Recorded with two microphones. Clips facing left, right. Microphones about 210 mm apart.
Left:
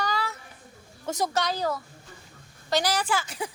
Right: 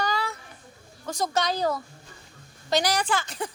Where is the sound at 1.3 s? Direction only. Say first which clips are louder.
Right 6 dB; 20° right (ahead or behind).